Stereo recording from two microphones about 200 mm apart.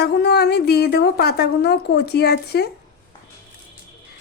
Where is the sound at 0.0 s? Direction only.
55° left (ahead or behind).